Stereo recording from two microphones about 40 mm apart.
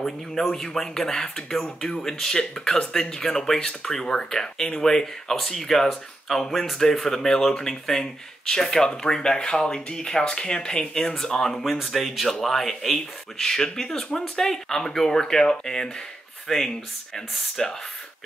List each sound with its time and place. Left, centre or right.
0.0 s speech: centre